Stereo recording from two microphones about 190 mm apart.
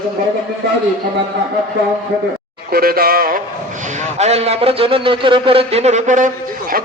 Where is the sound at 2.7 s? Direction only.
50° right (ahead or behind).